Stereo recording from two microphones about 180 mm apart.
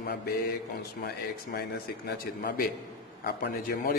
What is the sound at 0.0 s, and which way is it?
Mantra, 60° left (ahead or behind).